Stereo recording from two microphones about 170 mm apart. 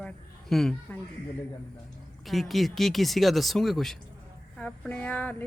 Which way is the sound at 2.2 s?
Centre (ahead or behind).